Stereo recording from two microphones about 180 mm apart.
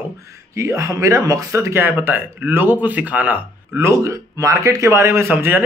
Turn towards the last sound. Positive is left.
turn(degrees=-10)  # may be behind; listen again after turning